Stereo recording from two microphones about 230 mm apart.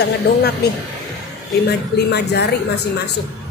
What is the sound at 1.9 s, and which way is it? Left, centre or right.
Speech, left.